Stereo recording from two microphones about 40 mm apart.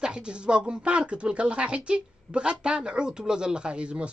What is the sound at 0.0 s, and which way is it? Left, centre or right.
Speech, right.